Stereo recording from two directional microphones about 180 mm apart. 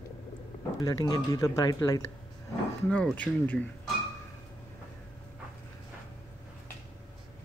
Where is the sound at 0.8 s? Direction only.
20° left (ahead or behind).